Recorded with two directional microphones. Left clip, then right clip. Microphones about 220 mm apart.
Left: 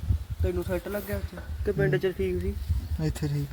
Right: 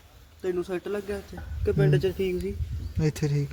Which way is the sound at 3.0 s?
25° right (ahead or behind).